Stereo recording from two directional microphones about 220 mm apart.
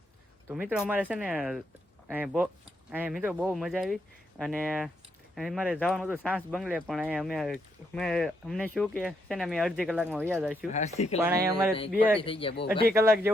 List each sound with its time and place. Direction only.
0.5 s speech: 5° right (ahead or behind)
10.7 s speech: 30° left (ahead or behind)
11.2 s speech: 10° right (ahead or behind)
12.2 s a man's voice: 25° left (ahead or behind)
12.9 s speech: 10° right (ahead or behind)